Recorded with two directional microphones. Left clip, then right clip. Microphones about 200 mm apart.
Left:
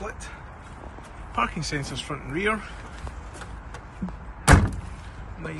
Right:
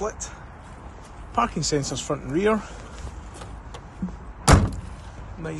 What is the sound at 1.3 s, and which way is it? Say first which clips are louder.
Speech: right 4 dB; 15° right (ahead or behind).